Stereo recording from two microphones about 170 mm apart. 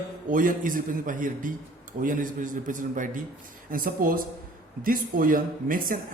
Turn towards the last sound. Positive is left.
turn(degrees=-55)  # may be behind; listen again after turning